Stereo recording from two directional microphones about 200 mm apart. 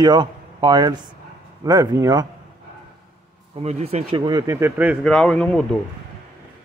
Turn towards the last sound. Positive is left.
turn(degrees=5)  # may be behind; listen again after turning